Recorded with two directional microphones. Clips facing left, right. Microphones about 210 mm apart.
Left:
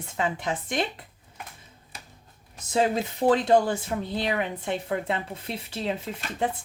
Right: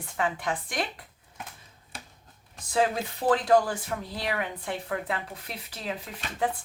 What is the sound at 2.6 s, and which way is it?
Speech, 25° left (ahead or behind).